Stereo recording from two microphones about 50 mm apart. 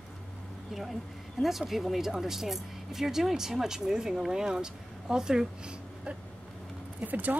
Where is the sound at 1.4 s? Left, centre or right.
Centre.